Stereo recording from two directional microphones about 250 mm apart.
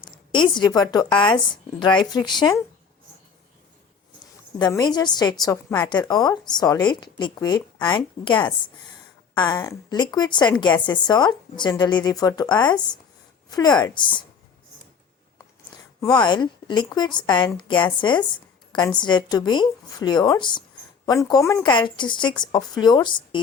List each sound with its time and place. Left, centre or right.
0.0 s a woman's voice: centre
4.5 s a woman's voice: centre
16.0 s a woman's voice: centre